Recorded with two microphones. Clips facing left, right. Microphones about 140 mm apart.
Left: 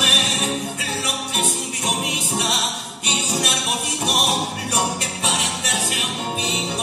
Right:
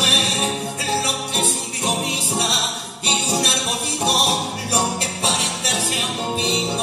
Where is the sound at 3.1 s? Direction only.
35° right (ahead or behind).